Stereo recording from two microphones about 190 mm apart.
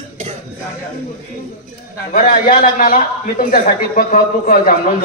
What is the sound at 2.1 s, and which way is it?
A man's voice, 45° left (ahead or behind).